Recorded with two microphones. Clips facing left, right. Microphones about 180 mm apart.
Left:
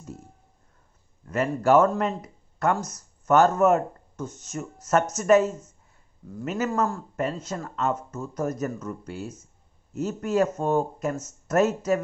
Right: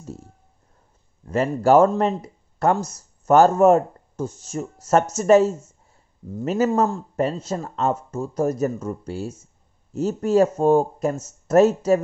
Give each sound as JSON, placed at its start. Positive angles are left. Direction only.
{"t": 1.2, "sound": "speech", "side_deg": -30}